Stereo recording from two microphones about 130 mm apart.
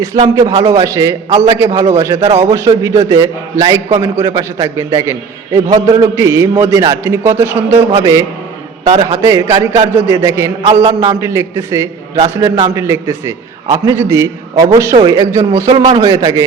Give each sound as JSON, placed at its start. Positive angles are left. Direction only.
{"t": 0.3, "sound": "a man's voice", "side_deg": -25}
{"t": 8.9, "sound": "a man's voice", "side_deg": -55}
{"t": 9.2, "sound": "a man's voice", "side_deg": -25}